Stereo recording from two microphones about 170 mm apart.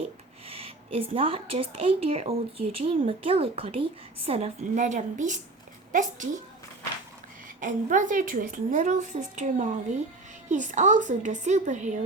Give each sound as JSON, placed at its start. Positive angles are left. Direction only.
{"t": 0.4, "sound": "a woman's voice", "side_deg": -35}
{"t": 7.6, "sound": "a woman's voice", "side_deg": -50}